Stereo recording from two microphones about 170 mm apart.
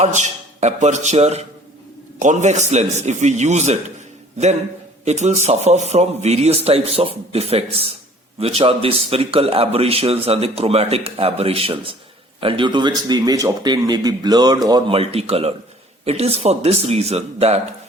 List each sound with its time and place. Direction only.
0.0 s a man's voice: 45° right (ahead or behind)
5.0 s a man's voice: 40° right (ahead or behind)